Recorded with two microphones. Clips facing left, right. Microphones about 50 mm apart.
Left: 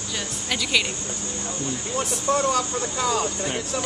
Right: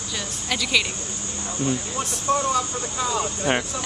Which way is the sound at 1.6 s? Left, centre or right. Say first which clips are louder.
Right 3 dB; right.